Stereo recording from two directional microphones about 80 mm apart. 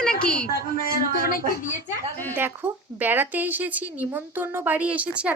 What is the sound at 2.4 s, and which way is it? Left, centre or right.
A woman's voice, right.